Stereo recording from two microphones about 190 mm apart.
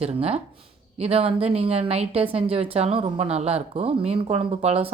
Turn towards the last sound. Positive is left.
turn(degrees=-30)  # may be behind; listen again after turning